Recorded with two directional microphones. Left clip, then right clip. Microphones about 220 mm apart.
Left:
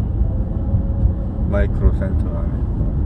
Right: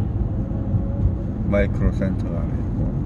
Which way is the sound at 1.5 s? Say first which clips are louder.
Right 1 dB; 20° right (ahead or behind).